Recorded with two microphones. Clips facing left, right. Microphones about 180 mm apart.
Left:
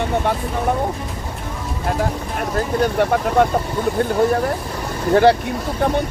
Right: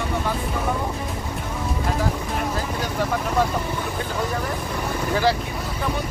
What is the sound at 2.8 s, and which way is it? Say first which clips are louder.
Speech: left 10 dB; 60° left (ahead or behind).